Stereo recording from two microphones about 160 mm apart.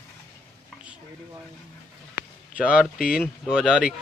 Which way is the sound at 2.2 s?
75° left (ahead or behind).